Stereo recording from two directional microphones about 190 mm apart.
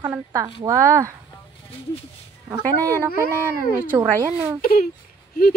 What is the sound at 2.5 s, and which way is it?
Speech, 15° right (ahead or behind).